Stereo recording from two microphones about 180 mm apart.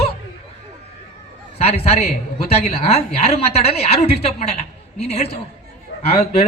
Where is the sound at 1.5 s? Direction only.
35° left (ahead or behind).